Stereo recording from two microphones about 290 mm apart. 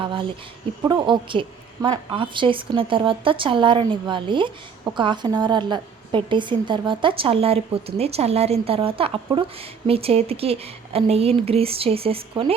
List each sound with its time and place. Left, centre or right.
0.0 s a woman's voice: centre